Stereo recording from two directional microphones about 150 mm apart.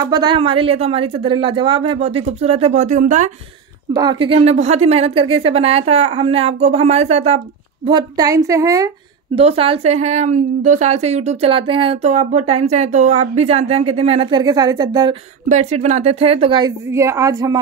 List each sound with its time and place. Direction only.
0.0 s a woman's voice: 30° right (ahead or behind); by 3.3 s 55° right (ahead or behind)
3.9 s a woman's voice: 30° right (ahead or behind); by 7.4 s 45° right (ahead or behind)
7.8 s a woman's voice: 25° right (ahead or behind)
9.3 s a woman's voice: 40° right (ahead or behind)
15.4 s a woman's voice: 50° right (ahead or behind); by 16.7 s 35° right (ahead or behind)
16.9 s a woman's voice: 20° right (ahead or behind)